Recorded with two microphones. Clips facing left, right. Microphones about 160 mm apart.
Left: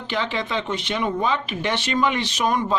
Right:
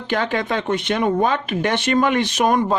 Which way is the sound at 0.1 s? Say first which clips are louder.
Right 4 dB; 50° right (ahead or behind).